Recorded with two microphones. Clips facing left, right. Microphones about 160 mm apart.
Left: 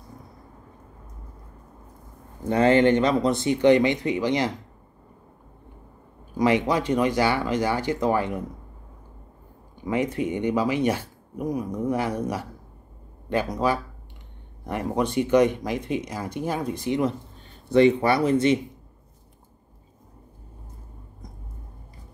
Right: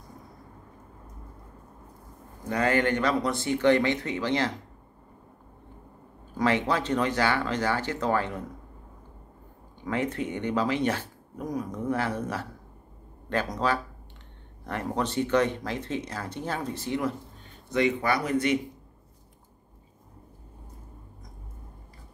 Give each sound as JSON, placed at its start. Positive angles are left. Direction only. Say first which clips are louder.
{"t": 2.4, "sound": "speech", "louder": "left 7 dB", "side_deg": 25}
{"t": 6.3, "sound": "speech", "louder": "left 4 dB", "side_deg": 15}
{"t": 9.8, "sound": "speech", "louder": "left 4 dB", "side_deg": 10}
{"t": 17.6, "sound": "speech", "louder": "left 7 dB", "side_deg": 30}